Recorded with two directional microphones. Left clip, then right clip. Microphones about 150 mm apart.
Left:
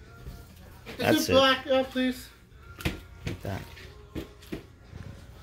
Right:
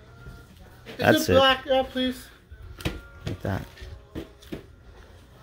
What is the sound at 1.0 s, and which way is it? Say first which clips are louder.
Speech: right 3 dB; 65° right (ahead or behind).